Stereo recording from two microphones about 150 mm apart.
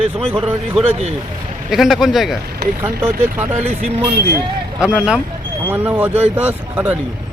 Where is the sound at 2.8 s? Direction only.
15° right (ahead or behind).